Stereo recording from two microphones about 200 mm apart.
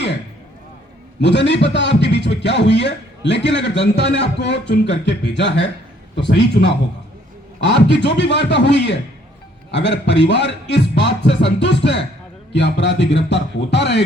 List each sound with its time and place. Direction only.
1.2 s a man's voice: 60° left (ahead or behind)